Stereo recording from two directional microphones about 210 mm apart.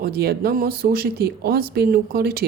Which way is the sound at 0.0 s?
45° right (ahead or behind).